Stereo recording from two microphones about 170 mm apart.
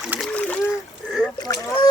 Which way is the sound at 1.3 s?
20° left (ahead or behind).